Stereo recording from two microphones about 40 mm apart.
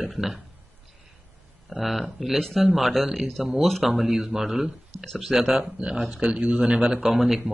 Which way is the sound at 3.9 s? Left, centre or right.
Centre.